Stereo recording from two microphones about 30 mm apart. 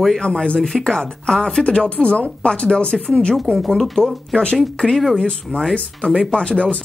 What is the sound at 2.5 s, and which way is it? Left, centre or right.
A woman's voice, left.